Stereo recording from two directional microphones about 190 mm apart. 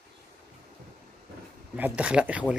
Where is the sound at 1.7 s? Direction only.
10° right (ahead or behind).